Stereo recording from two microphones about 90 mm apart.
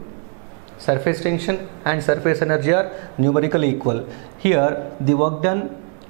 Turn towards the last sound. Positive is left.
turn(degrees=-10)  # may be behind; listen again after turning